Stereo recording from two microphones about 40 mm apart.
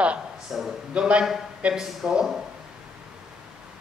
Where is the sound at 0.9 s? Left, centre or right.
Right.